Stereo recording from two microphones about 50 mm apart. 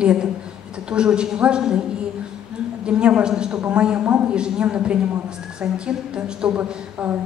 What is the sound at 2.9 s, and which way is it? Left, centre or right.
A woman's voice, right.